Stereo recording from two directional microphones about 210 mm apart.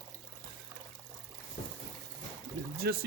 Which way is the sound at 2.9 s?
50° right (ahead or behind).